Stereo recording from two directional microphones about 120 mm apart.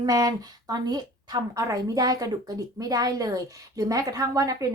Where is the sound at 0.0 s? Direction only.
30° right (ahead or behind).